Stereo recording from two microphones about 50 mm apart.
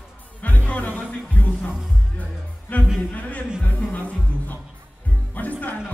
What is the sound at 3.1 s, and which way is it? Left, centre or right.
Music, left.